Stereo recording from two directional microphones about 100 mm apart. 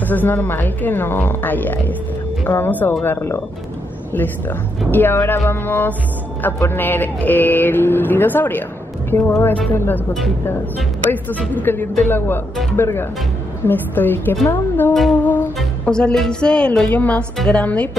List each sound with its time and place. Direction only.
0.0 s speech: 20° left (ahead or behind)
11.5 s speech: 20° left (ahead or behind)
15.1 s music: 15° left (ahead or behind)
17.5 s a woman's voice: 10° left (ahead or behind)